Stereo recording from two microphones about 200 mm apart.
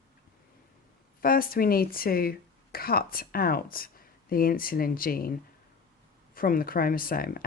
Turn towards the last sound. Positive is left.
turn(degrees=45)  # may be behind; listen again after turning